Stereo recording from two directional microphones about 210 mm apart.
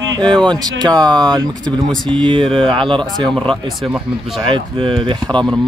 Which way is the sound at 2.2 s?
25° right (ahead or behind).